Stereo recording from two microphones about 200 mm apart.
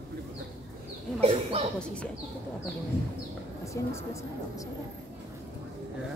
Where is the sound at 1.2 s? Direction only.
30° right (ahead or behind).